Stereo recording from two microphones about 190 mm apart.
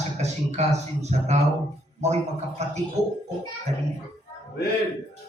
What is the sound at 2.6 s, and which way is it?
Speech, 35° right (ahead or behind).